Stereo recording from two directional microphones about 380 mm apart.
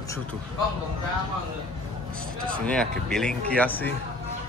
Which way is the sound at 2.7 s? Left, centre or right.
Centre.